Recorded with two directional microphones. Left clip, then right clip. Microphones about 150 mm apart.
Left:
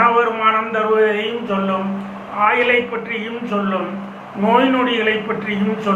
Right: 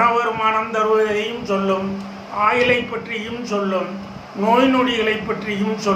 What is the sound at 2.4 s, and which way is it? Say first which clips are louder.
Speech: left 2 dB; 40° right (ahead or behind).